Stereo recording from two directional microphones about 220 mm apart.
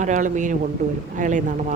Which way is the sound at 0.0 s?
35° right (ahead or behind).